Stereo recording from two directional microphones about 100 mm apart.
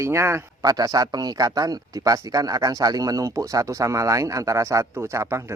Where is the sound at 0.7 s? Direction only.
40° right (ahead or behind).